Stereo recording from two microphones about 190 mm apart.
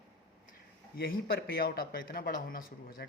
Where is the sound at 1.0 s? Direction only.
55° left (ahead or behind).